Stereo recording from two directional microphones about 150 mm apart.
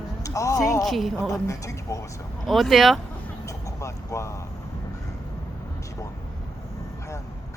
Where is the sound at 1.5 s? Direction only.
20° left (ahead or behind).